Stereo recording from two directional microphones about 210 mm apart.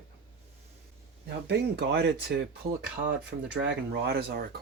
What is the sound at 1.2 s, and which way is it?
Speech, 55° right (ahead or behind).